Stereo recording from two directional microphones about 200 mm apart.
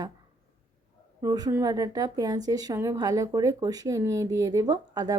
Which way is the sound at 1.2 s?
20° right (ahead or behind).